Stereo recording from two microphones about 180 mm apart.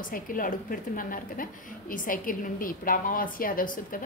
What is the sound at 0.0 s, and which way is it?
A woman's voice, 50° left (ahead or behind).